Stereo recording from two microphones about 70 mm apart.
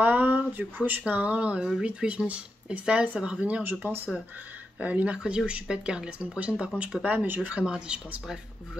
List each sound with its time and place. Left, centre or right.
0.0 s speech: right
3.6 s speech: right
4.7 s speech: centre
7.6 s speech: centre